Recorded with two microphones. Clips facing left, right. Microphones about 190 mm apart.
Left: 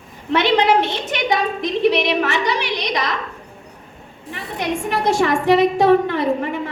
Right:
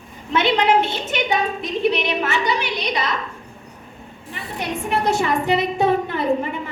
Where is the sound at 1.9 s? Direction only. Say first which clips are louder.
Left 3 dB; 80° left.